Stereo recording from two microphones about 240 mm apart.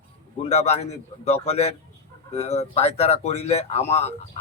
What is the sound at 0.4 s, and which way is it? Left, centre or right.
Speech, left.